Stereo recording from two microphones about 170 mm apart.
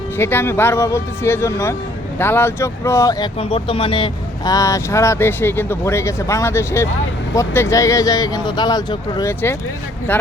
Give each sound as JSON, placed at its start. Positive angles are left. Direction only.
{"t": 0.2, "sound": "speech", "side_deg": 15}
{"t": 3.3, "sound": "speech", "side_deg": 30}
{"t": 10.1, "sound": "speech", "side_deg": 10}